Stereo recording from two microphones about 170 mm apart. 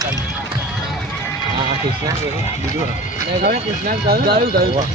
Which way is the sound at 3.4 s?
65° right (ahead or behind).